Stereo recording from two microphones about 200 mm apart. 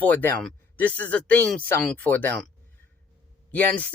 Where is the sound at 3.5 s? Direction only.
10° left (ahead or behind).